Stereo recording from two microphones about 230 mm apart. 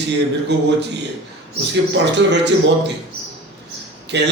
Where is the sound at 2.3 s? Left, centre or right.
Right.